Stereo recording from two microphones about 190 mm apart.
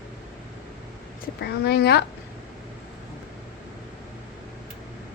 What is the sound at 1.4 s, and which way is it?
Speech, 60° left (ahead or behind).